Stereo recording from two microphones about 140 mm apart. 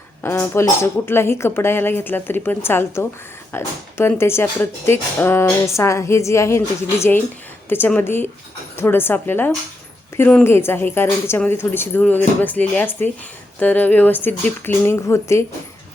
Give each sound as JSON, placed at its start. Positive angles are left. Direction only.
{"t": 0.2, "sound": "speech", "side_deg": 15}
{"t": 7.7, "sound": "speech", "side_deg": 10}